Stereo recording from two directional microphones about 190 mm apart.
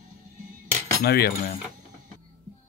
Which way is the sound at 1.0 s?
55° left (ahead or behind).